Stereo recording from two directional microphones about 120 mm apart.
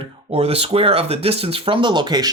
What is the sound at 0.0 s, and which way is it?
Speech, 55° right (ahead or behind).